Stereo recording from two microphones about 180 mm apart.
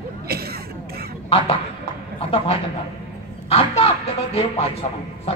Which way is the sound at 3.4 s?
35° left (ahead or behind).